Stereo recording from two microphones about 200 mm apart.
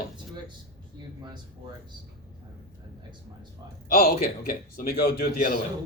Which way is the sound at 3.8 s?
45° left (ahead or behind).